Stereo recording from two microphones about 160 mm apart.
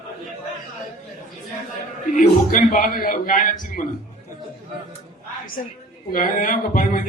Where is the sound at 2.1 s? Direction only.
60° left (ahead or behind).